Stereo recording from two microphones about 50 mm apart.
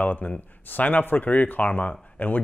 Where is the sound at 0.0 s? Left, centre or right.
Left.